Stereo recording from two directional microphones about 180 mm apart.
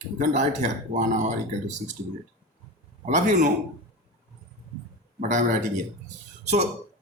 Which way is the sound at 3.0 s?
45° right (ahead or behind).